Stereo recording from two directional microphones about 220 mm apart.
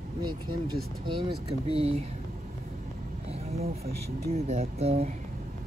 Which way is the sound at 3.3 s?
30° right (ahead or behind).